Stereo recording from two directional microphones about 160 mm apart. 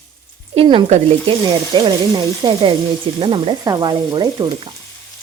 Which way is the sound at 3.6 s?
25° right (ahead or behind).